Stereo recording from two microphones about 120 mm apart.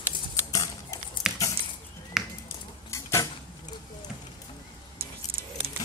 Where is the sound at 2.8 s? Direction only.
25° left (ahead or behind).